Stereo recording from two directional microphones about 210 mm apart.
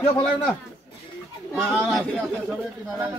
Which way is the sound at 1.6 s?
5° right (ahead or behind).